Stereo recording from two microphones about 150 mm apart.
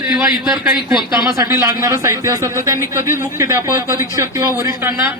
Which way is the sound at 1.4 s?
20° right (ahead or behind).